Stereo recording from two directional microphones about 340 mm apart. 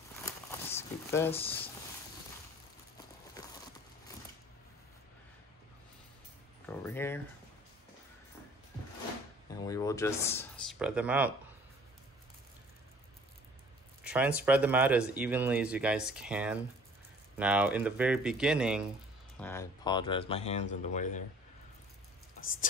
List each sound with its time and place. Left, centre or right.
0.2 s crumpling: centre
6.6 s a sound: centre
9.5 s speech: centre
14.0 s speech: centre; by 21.2 s left